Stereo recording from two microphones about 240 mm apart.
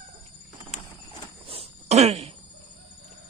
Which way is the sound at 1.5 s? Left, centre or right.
Right.